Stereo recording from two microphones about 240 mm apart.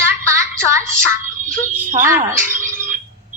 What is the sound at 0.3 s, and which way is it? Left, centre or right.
Music, centre.